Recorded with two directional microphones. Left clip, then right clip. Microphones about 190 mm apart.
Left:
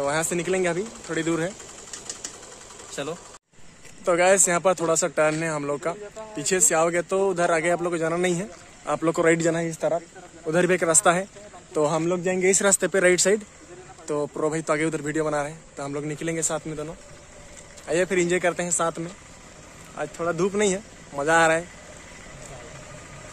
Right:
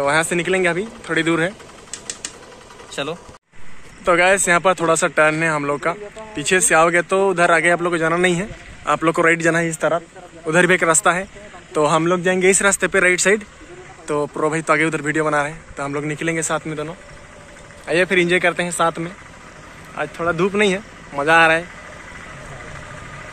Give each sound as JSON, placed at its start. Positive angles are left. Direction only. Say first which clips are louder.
{"t": 0.0, "sound": "a man's voice", "louder": "right 7 dB", "side_deg": 5}
{"t": 2.9, "sound": "a sound", "louder": "right 6 dB", "side_deg": 15}
{"t": 4.0, "sound": "a man's voice", "louder": "right 4 dB", "side_deg": 10}
{"t": 12.0, "sound": "speech", "louder": "right 7 dB", "side_deg": 0}
{"t": 14.0, "sound": "a man's voice", "louder": "right 6 dB", "side_deg": 10}